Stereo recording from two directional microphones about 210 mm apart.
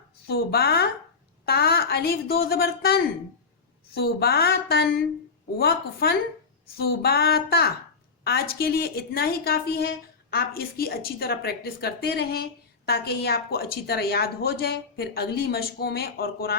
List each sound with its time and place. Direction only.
0.3 s a woman's voice: 50° left (ahead or behind)